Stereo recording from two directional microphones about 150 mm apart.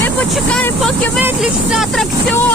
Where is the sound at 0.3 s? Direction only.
5° left (ahead or behind).